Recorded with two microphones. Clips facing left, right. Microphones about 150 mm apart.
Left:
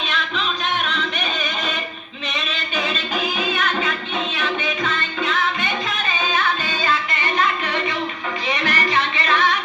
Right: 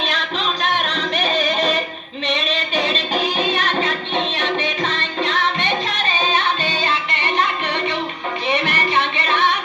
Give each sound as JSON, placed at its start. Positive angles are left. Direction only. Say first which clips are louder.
{"t": 0.1, "sound": "music", "louder": "right 2 dB", "side_deg": -35}
{"t": 8.6, "sound": "a sound", "louder": "right 1 dB", "side_deg": -20}
{"t": 9.2, "sound": "music", "louder": "left 1 dB", "side_deg": -20}